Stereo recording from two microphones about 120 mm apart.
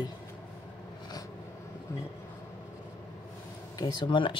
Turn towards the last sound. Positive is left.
turn(degrees=45)  # may be behind; listen again after turning